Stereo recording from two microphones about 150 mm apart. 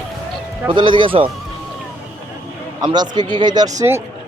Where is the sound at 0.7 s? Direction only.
35° right (ahead or behind).